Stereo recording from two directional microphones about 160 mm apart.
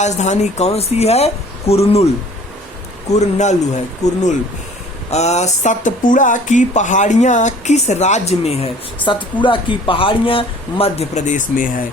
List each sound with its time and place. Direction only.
0.0 s speech: 45° left (ahead or behind)
3.1 s speech: 45° left (ahead or behind)